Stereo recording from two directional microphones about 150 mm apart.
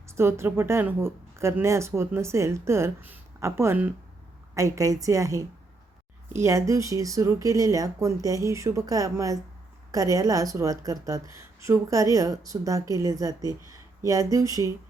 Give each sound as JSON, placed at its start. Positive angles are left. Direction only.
{"t": 0.1, "sound": "a woman's voice", "side_deg": -15}